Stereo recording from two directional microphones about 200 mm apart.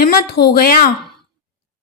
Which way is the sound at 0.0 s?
50° left (ahead or behind).